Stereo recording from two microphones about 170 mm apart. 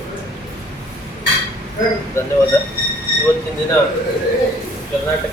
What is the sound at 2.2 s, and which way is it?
Speech, 15° left (ahead or behind).